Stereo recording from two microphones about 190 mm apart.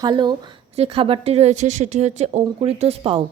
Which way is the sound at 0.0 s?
25° right (ahead or behind).